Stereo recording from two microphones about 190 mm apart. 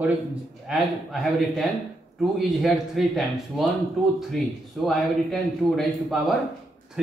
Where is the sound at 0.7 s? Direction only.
Centre (ahead or behind).